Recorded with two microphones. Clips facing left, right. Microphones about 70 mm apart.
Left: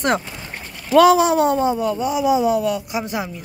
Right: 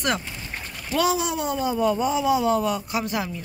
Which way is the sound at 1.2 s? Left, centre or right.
Left.